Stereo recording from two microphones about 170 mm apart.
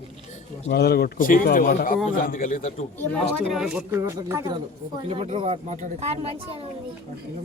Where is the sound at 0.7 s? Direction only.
70° left (ahead or behind); by 2.7 s 50° left (ahead or behind).